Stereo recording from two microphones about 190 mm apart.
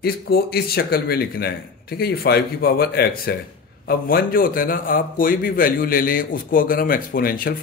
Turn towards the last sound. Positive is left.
turn(degrees=50)  # may be behind; listen again after turning